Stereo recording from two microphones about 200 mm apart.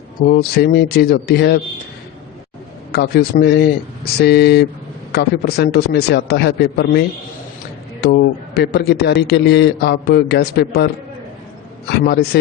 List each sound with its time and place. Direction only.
0.3 s speech: 50° left (ahead or behind)
2.9 s a man's voice: 50° left (ahead or behind)
8.0 s a man's voice: 55° left (ahead or behind)
11.9 s speech: 55° left (ahead or behind)